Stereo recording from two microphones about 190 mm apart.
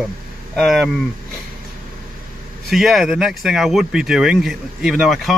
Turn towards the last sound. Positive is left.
turn(degrees=0)  # may be behind; listen again after turning